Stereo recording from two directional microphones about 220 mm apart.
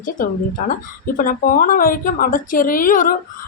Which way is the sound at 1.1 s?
40° left (ahead or behind).